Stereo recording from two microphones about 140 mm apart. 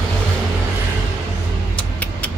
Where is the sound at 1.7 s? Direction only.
10° left (ahead or behind).